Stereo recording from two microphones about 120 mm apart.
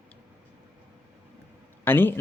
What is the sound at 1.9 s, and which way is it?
Speech, 20° left (ahead or behind).